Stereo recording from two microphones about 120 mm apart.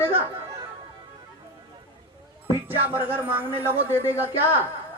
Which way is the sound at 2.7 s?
15° right (ahead or behind).